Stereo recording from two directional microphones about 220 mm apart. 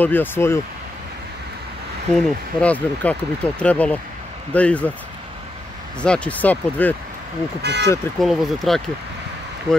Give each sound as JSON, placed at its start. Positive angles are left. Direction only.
{"t": 0.0, "sound": "speech", "side_deg": 10}
{"t": 2.1, "sound": "speech", "side_deg": 5}
{"t": 5.9, "sound": "speech", "side_deg": 5}
{"t": 7.6, "sound": "speech", "side_deg": -50}
{"t": 8.2, "sound": "speech", "side_deg": 0}